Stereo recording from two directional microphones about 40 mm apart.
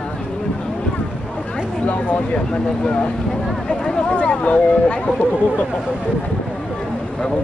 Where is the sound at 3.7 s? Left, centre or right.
Left.